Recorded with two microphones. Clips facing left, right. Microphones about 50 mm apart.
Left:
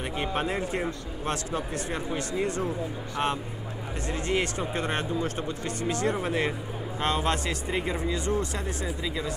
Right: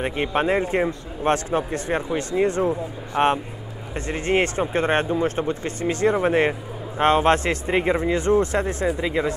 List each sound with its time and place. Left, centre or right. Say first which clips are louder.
0.0 s speech: right 7 dB; right